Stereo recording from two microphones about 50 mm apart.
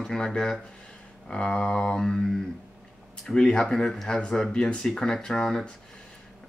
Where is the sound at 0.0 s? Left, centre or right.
Centre.